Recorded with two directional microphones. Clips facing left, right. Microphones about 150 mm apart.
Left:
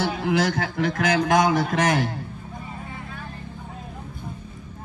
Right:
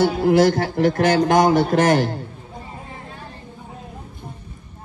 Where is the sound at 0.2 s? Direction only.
45° right (ahead or behind).